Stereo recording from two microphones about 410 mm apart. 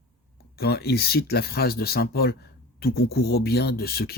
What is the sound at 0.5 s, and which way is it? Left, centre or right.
Speech, left.